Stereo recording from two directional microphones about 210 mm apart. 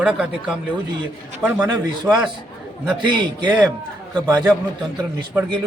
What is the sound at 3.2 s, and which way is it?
A man's voice, 20° right (ahead or behind).